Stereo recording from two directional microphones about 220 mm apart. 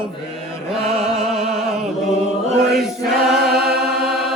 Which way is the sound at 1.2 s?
Centre (ahead or behind).